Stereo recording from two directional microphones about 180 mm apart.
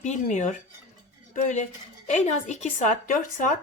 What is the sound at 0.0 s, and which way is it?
Speech, 40° left (ahead or behind).